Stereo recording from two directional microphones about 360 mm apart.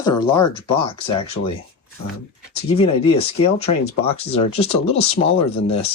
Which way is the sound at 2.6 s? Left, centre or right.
Centre.